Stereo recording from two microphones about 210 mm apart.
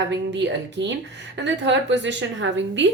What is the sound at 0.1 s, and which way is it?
A woman's voice, 55° right (ahead or behind).